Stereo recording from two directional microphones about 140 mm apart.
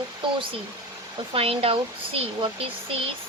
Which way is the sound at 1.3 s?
45° right (ahead or behind).